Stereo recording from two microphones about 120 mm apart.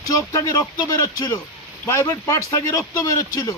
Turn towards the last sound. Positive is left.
turn(degrees=25)  # may be behind; listen again after turning